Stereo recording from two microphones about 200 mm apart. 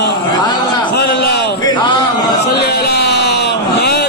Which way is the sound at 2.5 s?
55° left (ahead or behind).